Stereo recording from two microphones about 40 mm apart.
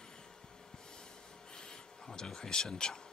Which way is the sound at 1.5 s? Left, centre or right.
Centre.